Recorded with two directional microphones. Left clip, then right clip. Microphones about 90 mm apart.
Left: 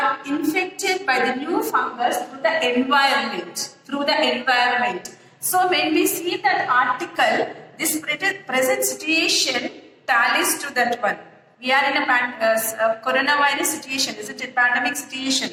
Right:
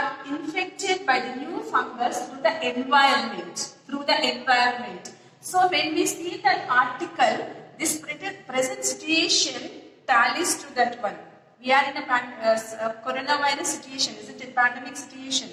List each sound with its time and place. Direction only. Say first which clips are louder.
0.0 s a woman's voice: left 7 dB; 30° left (ahead or behind)